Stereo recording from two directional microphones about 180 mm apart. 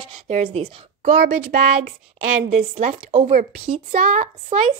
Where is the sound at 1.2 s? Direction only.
55° right (ahead or behind).